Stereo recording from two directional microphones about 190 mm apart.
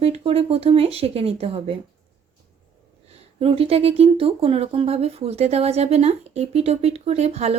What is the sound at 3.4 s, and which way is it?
Speech, 30° right (ahead or behind).